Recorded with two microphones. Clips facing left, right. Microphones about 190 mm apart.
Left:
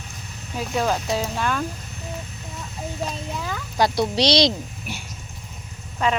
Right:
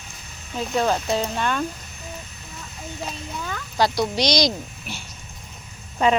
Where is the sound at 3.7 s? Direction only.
25° left (ahead or behind).